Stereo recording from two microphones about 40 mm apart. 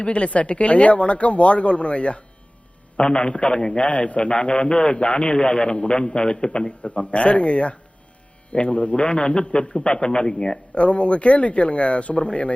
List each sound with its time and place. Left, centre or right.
0.0 s a man's voice: left
3.8 s a man's voice: left; by 10.6 s centre
10.8 s speech: left